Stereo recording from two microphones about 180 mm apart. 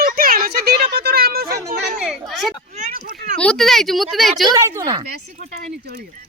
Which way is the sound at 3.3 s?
5° left (ahead or behind).